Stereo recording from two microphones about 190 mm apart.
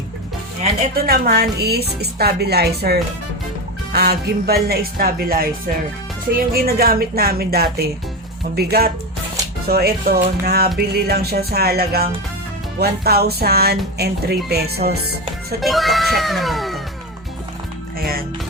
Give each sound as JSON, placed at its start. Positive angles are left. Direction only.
{"t": 0.9, "sound": "speech", "side_deg": -55}
{"t": 15.6, "sound": "speech", "side_deg": 0}